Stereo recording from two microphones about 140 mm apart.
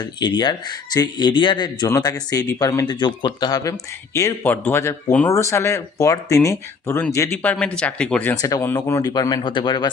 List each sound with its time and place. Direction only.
0.0 s speech: 30° left (ahead or behind)
7.4 s speech: 10° left (ahead or behind)
8.4 s speech: 25° left (ahead or behind)